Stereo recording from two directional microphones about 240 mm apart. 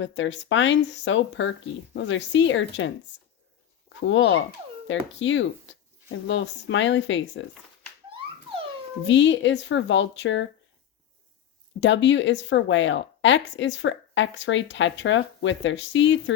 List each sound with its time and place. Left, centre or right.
0.0 s speech: left
4.0 s speech: left
9.0 s speech: left
11.8 s speech: left